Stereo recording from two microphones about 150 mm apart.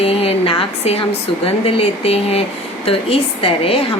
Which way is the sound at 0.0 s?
40° left (ahead or behind).